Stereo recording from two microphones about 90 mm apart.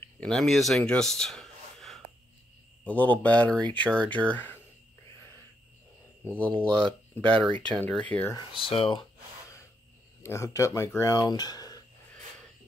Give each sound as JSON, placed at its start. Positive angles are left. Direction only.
{"t": 0.2, "sound": "speech", "side_deg": 5}
{"t": 2.8, "sound": "speech", "side_deg": 15}
{"t": 6.2, "sound": "speech", "side_deg": 15}
{"t": 8.4, "sound": "speech", "side_deg": 85}
{"t": 10.2, "sound": "speech", "side_deg": 30}